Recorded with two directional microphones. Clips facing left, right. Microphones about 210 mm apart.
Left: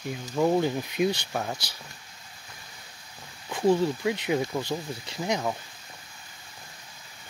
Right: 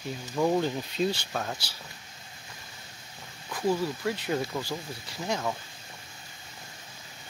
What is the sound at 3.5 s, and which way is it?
Speech, 25° left (ahead or behind).